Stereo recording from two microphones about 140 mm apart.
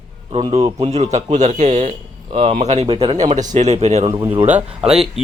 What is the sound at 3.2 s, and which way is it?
Speech, 55° right (ahead or behind).